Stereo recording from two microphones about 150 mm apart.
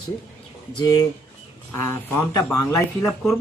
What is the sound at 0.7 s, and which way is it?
Speech, 25° left (ahead or behind).